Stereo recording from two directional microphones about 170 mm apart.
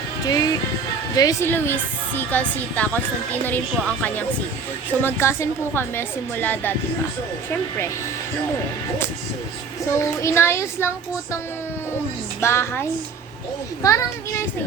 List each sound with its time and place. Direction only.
0.3 s music: 20° left (ahead or behind)
1.1 s a woman's voice: 20° left (ahead or behind)
9.8 s a woman's voice: 20° left (ahead or behind)
12.4 s a woman's voice: 15° left (ahead or behind)